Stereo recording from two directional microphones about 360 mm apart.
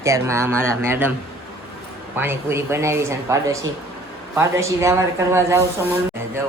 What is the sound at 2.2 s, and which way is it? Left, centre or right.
Speech, centre.